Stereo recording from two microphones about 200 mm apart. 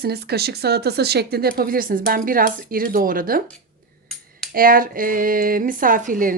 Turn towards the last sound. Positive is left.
turn(degrees=-45)  # may be behind; listen again after turning